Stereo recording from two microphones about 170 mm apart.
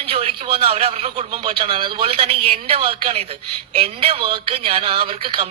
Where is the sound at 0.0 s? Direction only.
35° right (ahead or behind).